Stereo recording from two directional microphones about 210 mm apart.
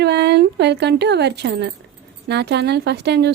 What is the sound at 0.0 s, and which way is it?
Speech, 55° right (ahead or behind).